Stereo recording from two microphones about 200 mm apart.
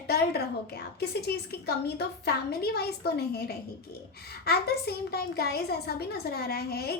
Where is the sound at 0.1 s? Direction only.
55° left (ahead or behind).